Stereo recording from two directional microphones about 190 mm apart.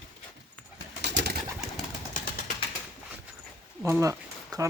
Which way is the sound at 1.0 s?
65° right (ahead or behind).